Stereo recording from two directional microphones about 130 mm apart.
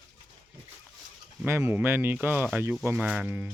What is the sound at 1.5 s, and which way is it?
Speech, 20° right (ahead or behind).